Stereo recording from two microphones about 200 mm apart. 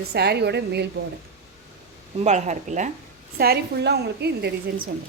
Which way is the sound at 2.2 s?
35° right (ahead or behind).